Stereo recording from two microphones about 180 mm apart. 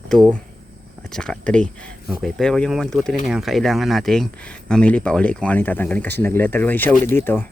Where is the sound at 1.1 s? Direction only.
5° left (ahead or behind).